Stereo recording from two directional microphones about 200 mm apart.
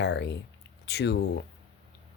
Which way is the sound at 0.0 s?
60° left (ahead or behind).